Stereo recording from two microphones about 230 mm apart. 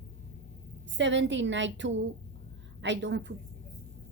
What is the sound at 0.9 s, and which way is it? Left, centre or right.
Speech, right.